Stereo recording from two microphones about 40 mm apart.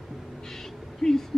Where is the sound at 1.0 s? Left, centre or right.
Centre.